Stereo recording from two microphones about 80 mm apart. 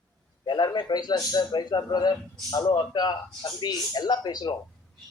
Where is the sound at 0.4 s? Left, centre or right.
Left.